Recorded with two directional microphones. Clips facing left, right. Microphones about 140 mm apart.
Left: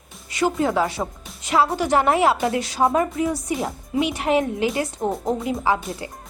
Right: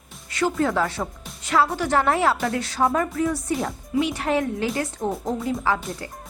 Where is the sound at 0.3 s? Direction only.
15° left (ahead or behind).